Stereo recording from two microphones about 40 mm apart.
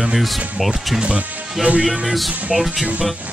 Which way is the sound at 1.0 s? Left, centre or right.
Right.